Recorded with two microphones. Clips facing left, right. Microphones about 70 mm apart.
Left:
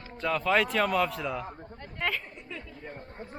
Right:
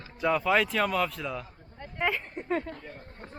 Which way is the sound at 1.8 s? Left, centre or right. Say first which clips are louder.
Right 3 dB; centre.